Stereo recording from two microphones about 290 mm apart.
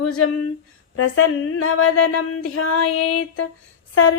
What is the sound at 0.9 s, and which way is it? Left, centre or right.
Speech, left.